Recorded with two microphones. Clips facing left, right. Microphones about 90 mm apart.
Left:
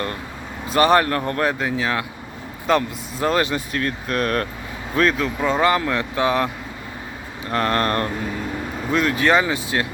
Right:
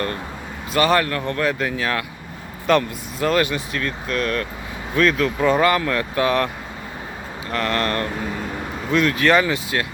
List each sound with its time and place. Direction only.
0.7 s speech: 30° left (ahead or behind)
1.5 s speech: 15° left (ahead or behind)
3.2 s speech: 30° left (ahead or behind)
5.5 s speech: 20° left (ahead or behind)
7.5 s speech: 35° left (ahead or behind)
8.9 s speech: 20° left (ahead or behind)